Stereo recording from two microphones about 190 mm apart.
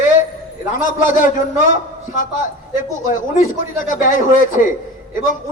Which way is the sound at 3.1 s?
45° left (ahead or behind).